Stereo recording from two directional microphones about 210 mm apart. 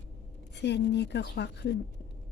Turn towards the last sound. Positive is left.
turn(degrees=55)  # may be behind; listen again after turning